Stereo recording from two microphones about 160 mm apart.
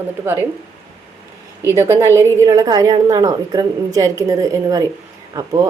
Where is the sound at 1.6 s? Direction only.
15° right (ahead or behind).